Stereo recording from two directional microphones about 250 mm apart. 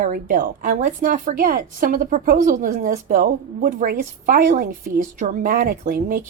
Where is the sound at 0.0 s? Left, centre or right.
Right.